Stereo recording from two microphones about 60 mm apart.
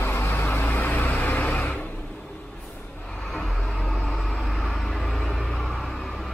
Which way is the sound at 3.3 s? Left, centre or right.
Centre.